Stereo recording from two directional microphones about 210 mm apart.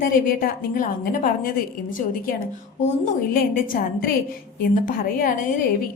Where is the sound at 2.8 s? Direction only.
35° left (ahead or behind).